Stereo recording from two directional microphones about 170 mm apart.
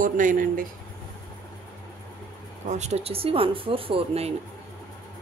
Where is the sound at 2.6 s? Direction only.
40° right (ahead or behind).